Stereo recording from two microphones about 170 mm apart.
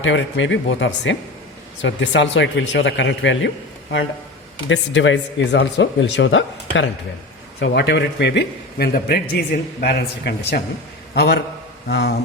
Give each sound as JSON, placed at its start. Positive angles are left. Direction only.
{"t": 0.0, "sound": "speech", "side_deg": 90}
{"t": 4.7, "sound": "a man's voice", "side_deg": 90}